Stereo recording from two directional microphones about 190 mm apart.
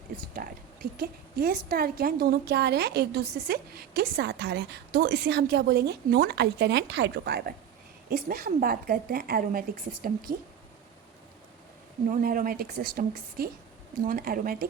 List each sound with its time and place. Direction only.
0.3 s a woman's voice: 50° right (ahead or behind)
12.0 s a woman's voice: 45° right (ahead or behind)